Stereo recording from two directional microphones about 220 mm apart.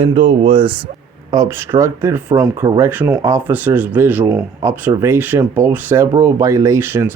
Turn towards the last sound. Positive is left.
turn(degrees=-10)  # may be behind; listen again after turning